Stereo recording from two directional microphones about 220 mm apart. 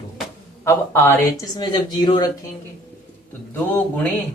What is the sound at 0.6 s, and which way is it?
Speech, 10° left (ahead or behind).